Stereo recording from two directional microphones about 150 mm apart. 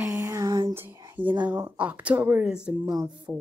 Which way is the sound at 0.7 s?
15° right (ahead or behind).